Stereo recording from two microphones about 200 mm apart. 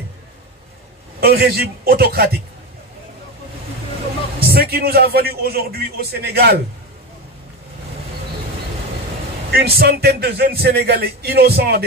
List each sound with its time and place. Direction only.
1.2 s a man's voice: 50° right (ahead or behind)
4.5 s a man's voice: 50° right (ahead or behind)
9.5 s a man's voice: 50° right (ahead or behind)